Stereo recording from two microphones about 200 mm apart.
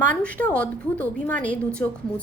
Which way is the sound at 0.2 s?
5° left (ahead or behind).